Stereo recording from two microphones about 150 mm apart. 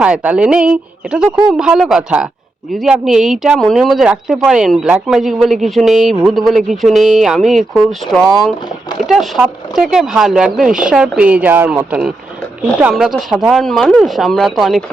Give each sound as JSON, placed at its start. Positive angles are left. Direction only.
{"t": 0.0, "sound": "speech", "side_deg": -10}